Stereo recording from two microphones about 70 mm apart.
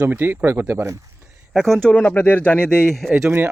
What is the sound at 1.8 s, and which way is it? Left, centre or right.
Speech, centre.